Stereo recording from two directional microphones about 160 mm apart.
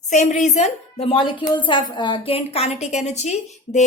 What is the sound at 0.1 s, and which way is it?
A woman's voice, 50° left (ahead or behind).